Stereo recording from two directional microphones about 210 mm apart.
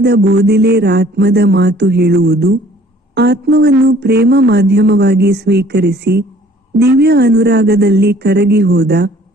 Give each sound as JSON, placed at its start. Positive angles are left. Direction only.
{"t": 0.0, "sound": "speech", "side_deg": -50}